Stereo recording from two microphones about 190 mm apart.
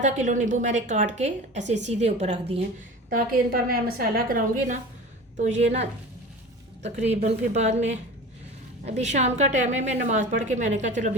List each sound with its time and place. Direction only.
0.0 s a woman's voice: 40° right (ahead or behind)
3.1 s a woman's voice: 50° right (ahead or behind); by 5.9 s 35° right (ahead or behind)
7.1 s a woman's voice: 35° right (ahead or behind)